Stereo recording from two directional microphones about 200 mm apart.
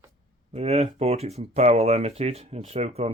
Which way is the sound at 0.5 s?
30° right (ahead or behind).